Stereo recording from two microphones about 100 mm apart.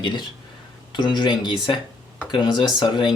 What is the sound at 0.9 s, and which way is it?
Speech, 50° left (ahead or behind).